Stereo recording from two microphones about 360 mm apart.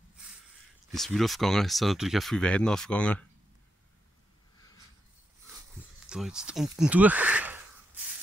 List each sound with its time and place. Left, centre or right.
0.9 s speech: centre
6.0 s speech: centre